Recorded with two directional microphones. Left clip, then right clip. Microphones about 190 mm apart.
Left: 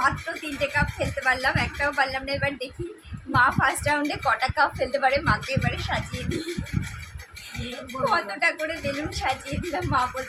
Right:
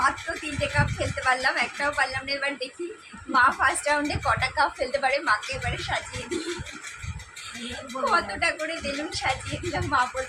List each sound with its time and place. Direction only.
0.6 s a woman's voice: 15° left (ahead or behind)
8.1 s a woman's voice: 10° left (ahead or behind)